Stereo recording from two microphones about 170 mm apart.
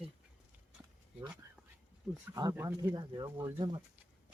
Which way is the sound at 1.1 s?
10° right (ahead or behind).